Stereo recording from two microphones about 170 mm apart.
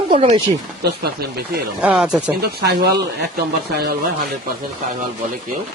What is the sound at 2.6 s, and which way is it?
Speech, 70° right (ahead or behind).